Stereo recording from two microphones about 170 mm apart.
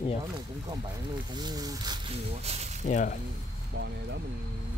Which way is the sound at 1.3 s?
25° right (ahead or behind).